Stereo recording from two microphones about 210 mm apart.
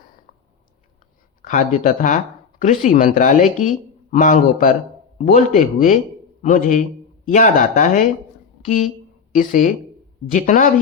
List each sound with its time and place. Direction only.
1.4 s speech: 40° left (ahead or behind)